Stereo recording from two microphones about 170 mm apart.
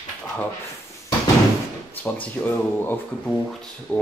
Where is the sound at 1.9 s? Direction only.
10° left (ahead or behind).